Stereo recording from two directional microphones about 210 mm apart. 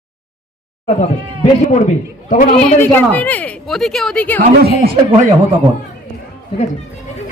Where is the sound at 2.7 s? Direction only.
10° left (ahead or behind).